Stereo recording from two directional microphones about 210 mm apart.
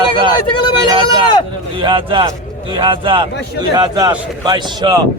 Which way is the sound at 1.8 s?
25° right (ahead or behind).